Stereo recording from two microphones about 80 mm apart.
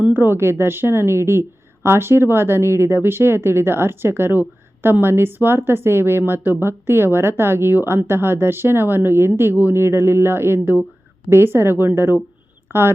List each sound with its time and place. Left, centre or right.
0.1 s a woman's voice: right